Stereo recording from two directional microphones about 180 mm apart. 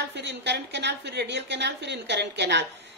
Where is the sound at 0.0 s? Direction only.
70° right (ahead or behind).